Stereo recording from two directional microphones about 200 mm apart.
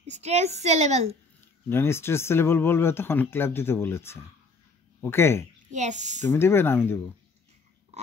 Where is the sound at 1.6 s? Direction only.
10° left (ahead or behind).